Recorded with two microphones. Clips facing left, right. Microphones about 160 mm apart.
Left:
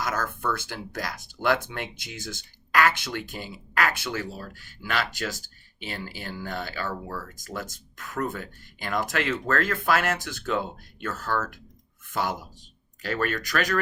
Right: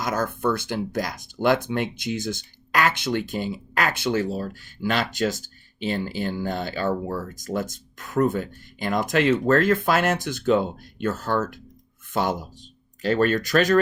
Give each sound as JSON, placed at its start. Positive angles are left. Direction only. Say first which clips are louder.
{"t": 0.0, "sound": "speech", "louder": "right 5 dB", "side_deg": -20}